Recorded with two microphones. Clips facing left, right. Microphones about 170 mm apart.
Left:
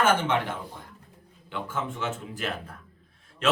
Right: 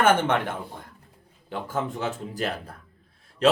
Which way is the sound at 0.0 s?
55° right (ahead or behind).